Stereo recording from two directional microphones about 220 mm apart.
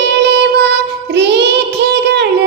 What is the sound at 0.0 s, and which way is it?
Music, 50° right (ahead or behind).